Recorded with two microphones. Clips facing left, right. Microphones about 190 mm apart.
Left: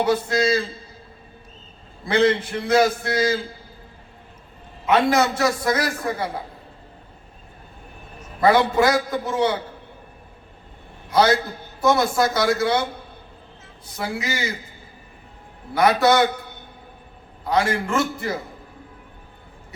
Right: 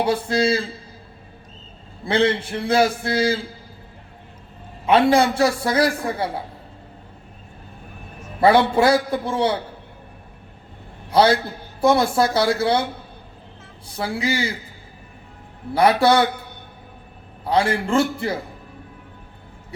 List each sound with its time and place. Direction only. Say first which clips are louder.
0.0 s a man's voice: even; 30° right (ahead or behind)
2.0 s a man's voice: left 1 dB; 30° right (ahead or behind)
4.9 s a man's voice: right 3 dB; 30° right (ahead or behind)
8.4 s a man's voice: right 2 dB; 30° right (ahead or behind)
11.1 s a man's voice: right 2 dB; 30° right (ahead or behind)
13.8 s a man's voice: right 4 dB; 30° right (ahead or behind)
15.7 s a man's voice: right 1 dB; 30° right (ahead or behind)
17.4 s a man's voice: right 1 dB; 30° right (ahead or behind)